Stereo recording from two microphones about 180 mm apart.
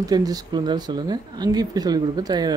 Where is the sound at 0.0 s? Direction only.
20° right (ahead or behind).